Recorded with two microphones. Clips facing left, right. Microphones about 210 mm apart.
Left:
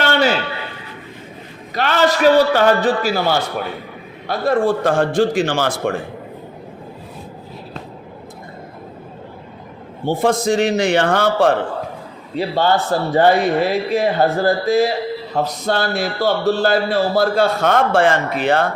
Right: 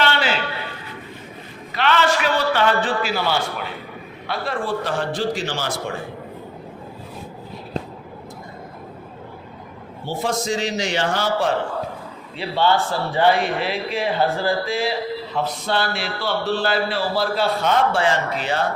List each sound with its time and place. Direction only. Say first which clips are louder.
0.0 s a sound: left 5 dB; 45° left (ahead or behind)
1.7 s a man's voice: left 3 dB; 40° left (ahead or behind)
10.1 s a man's voice: left 7 dB; 55° left (ahead or behind)
12.4 s speech: left 3 dB; 45° left (ahead or behind)